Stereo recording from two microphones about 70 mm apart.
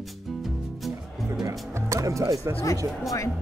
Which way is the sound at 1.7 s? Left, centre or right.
Right.